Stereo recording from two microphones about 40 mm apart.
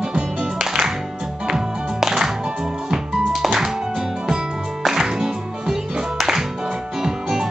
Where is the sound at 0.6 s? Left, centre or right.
Centre.